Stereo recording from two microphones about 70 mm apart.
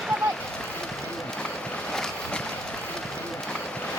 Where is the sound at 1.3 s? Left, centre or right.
Centre.